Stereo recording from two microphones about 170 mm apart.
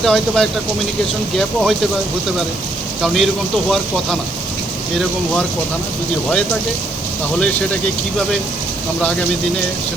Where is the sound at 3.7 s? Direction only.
Centre (ahead or behind).